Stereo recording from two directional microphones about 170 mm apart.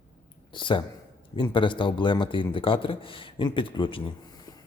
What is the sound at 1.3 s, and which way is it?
Speech, 30° left (ahead or behind).